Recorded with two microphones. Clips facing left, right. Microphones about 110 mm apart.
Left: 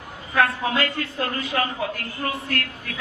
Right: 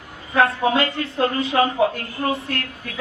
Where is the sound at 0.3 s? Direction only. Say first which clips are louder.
Right 4 dB; 25° right (ahead or behind).